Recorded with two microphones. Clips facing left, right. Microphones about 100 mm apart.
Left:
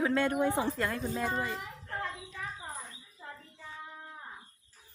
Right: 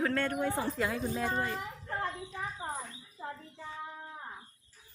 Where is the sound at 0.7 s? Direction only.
5° right (ahead or behind).